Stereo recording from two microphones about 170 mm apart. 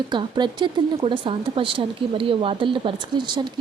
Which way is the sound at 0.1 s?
25° right (ahead or behind).